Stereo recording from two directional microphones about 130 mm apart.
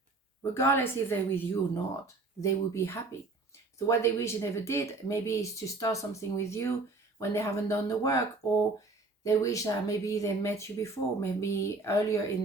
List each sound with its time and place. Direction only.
0.5 s a woman's voice: 20° left (ahead or behind)
9.2 s speech: 25° left (ahead or behind)